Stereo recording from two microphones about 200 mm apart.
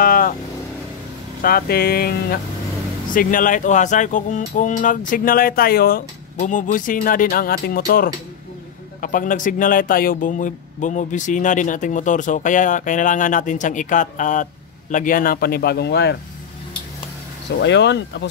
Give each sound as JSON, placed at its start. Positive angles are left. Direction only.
{"t": 0.0, "sound": "vehicle", "side_deg": 45}
{"t": 1.4, "sound": "speech", "side_deg": 50}
{"t": 17.6, "sound": "speech", "side_deg": 60}